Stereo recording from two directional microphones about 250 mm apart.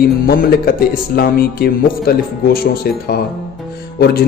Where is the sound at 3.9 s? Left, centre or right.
Left.